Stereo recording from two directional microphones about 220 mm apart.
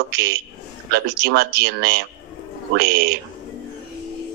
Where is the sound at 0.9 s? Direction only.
45° right (ahead or behind).